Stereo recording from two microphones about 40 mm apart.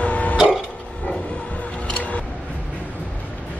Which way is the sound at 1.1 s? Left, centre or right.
Left.